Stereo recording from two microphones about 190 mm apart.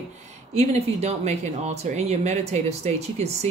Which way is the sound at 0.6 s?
35° right (ahead or behind).